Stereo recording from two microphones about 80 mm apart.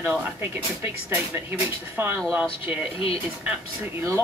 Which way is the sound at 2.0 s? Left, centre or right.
Right.